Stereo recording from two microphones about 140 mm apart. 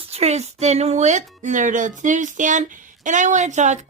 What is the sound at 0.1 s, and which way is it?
Speech, 50° right (ahead or behind).